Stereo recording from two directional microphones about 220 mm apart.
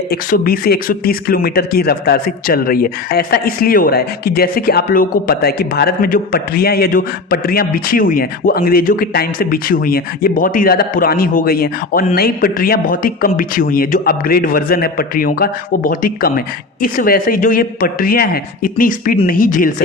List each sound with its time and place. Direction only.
0.1 s speech: 40° left (ahead or behind)